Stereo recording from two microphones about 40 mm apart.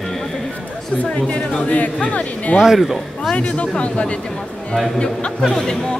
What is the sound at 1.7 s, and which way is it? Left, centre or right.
Speech, left.